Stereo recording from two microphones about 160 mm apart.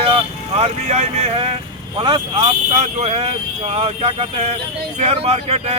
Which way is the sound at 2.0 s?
30° right (ahead or behind).